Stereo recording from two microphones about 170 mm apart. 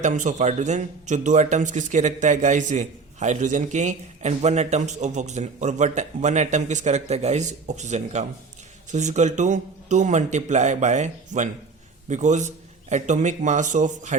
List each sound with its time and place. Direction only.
0.0 s speech: 45° right (ahead or behind)